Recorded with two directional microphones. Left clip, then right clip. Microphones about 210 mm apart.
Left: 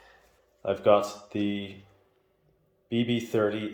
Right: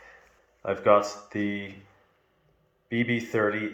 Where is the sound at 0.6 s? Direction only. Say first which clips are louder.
Right 1 dB; 45° left (ahead or behind).